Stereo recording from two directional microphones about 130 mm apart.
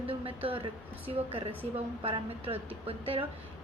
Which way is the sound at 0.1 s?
45° right (ahead or behind).